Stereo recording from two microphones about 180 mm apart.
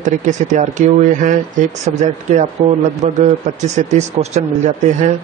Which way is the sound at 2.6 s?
50° right (ahead or behind).